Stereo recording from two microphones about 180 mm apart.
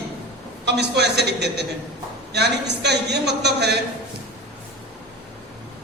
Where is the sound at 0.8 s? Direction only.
70° right (ahead or behind).